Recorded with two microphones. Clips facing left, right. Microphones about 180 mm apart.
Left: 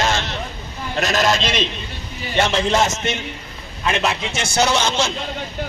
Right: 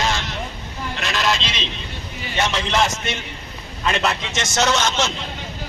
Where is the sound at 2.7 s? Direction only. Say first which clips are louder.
Left 2 dB; 20° left (ahead or behind).